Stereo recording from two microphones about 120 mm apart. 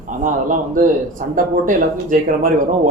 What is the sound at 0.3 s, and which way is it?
Speech, 90° right.